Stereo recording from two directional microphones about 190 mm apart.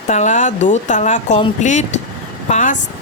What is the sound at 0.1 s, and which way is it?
Speech, 40° left (ahead or behind).